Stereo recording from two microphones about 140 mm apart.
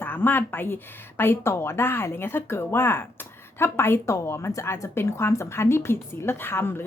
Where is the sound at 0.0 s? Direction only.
15° left (ahead or behind).